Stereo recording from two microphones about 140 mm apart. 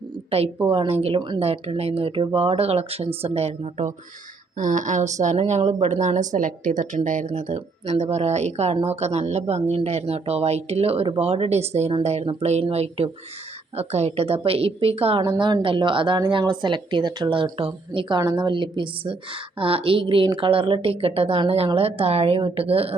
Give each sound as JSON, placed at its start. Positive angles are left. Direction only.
{"t": 0.3, "sound": "a woman's voice", "side_deg": -45}
{"t": 1.4, "sound": "speech", "side_deg": -45}
{"t": 15.4, "sound": "a woman's voice", "side_deg": -35}